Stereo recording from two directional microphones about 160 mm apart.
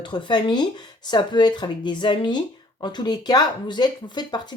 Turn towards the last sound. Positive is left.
turn(degrees=25)  # may be behind; listen again after turning